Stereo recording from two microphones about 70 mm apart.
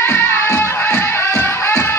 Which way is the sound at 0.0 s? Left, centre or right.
Left.